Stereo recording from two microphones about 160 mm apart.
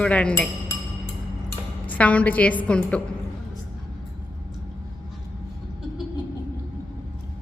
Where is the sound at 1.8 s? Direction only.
10° left (ahead or behind).